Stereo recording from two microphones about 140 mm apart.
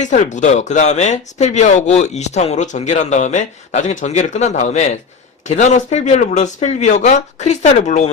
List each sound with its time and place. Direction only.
0.0 s speech: 60° left (ahead or behind)